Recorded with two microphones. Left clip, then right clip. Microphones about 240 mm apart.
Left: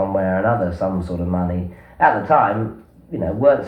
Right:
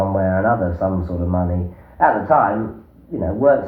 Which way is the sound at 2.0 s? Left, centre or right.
Left.